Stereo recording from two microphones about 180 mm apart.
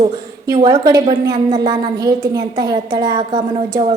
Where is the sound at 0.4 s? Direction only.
25° right (ahead or behind).